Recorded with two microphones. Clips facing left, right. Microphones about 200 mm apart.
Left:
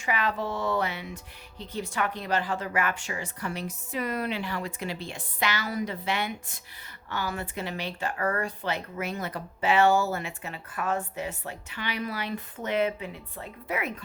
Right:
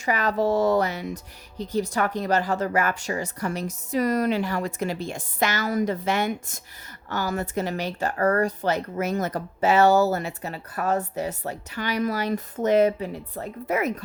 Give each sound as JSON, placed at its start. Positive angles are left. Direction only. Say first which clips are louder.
{"t": 0.0, "sound": "speech", "louder": "right 6 dB", "side_deg": -40}